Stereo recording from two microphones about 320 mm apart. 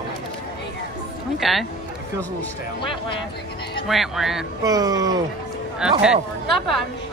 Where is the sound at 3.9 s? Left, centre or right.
Centre.